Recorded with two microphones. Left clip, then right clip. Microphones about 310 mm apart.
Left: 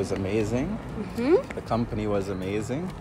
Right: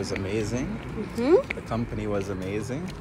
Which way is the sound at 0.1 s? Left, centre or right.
Centre.